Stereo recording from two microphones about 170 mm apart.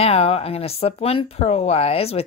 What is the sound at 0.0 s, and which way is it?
Speech, 35° left (ahead or behind).